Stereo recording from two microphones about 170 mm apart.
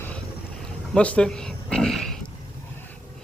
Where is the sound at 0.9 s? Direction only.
5° left (ahead or behind).